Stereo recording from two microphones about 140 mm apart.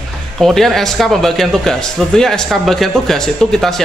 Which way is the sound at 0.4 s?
Centre (ahead or behind).